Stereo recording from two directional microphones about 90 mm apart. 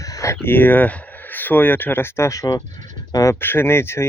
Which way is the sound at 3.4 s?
25° left (ahead or behind).